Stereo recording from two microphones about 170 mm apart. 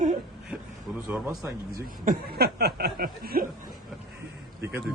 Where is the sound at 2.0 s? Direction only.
70° right (ahead or behind).